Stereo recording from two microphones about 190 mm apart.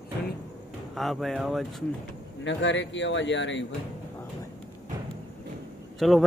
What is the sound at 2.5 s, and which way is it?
A man's voice, 75° left (ahead or behind).